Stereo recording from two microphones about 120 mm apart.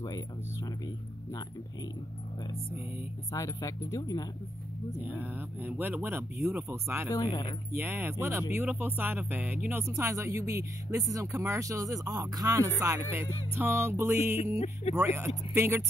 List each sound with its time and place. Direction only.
3.3 s speech: 25° left (ahead or behind)
5.0 s speech: 15° right (ahead or behind)